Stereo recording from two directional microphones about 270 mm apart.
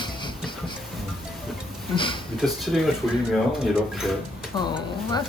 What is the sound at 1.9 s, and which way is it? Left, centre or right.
Speech, centre.